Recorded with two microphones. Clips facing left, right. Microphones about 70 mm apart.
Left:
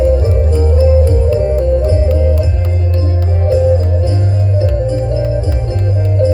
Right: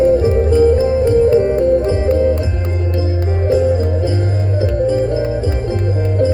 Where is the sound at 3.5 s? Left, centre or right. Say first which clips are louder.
Left 3 dB; right.